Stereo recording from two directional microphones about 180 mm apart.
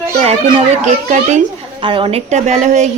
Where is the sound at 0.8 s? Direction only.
40° right (ahead or behind).